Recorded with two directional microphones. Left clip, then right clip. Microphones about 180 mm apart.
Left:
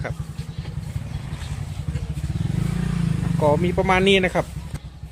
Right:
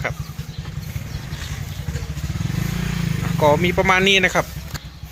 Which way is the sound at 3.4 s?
5° left (ahead or behind).